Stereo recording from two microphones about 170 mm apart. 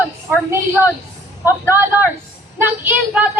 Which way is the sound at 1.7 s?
15° right (ahead or behind).